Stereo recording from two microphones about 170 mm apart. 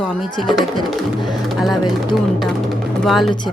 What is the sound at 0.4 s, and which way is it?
Speech, centre (ahead or behind).